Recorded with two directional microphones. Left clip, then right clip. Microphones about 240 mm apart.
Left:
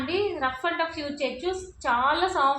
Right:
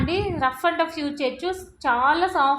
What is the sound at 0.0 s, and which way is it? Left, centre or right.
A woman's voice, right.